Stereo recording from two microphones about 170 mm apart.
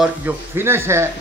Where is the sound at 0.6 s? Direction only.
15° right (ahead or behind).